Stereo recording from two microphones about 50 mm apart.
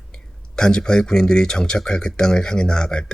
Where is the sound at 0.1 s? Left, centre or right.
Centre.